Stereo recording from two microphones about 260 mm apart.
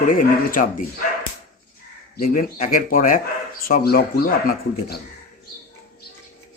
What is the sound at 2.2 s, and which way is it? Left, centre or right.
Speech, left.